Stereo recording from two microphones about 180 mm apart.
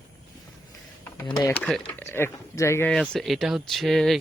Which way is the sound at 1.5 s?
5° left (ahead or behind).